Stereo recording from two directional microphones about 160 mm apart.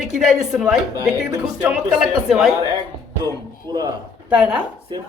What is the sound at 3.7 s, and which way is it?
Speech, 25° right (ahead or behind).